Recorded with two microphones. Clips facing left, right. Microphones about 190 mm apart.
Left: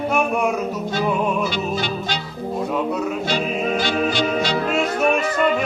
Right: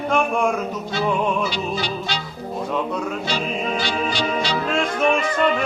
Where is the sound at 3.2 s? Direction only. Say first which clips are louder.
Left 3 dB; 50° left (ahead or behind).